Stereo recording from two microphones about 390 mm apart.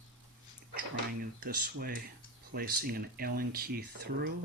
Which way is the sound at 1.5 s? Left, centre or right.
Right.